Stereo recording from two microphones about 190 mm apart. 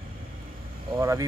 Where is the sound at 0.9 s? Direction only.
15° right (ahead or behind).